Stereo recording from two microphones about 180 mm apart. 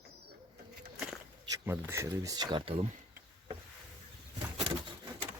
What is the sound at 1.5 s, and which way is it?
Speech, 15° right (ahead or behind).